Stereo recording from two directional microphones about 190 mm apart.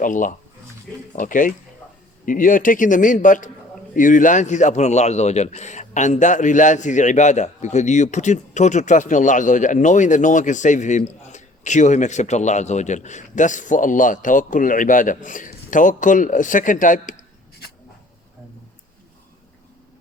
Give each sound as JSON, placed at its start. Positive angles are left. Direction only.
{"t": 0.0, "sound": "a man's voice", "side_deg": 45}